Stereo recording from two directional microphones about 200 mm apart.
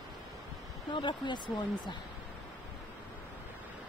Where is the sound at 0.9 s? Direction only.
25° left (ahead or behind).